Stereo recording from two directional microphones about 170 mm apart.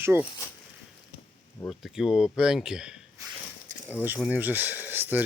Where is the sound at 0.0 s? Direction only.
15° right (ahead or behind).